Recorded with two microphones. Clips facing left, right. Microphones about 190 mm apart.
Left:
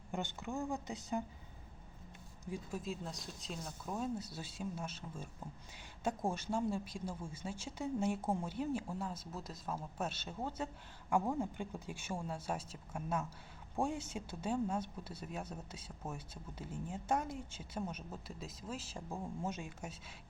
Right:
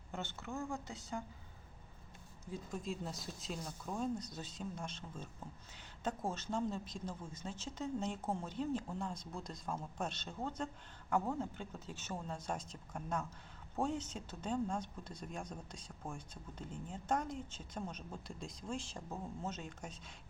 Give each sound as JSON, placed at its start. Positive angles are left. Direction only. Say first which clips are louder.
{"t": 0.1, "sound": "speech", "louder": "left 3 dB", "side_deg": 15}
{"t": 2.5, "sound": "speech", "louder": "left 1 dB", "side_deg": 5}